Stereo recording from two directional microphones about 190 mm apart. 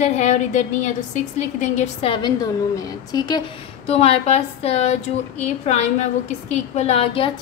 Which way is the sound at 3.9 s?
35° left (ahead or behind).